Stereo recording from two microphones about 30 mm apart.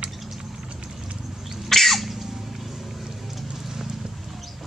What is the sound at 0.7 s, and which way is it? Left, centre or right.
Clip-clop, right.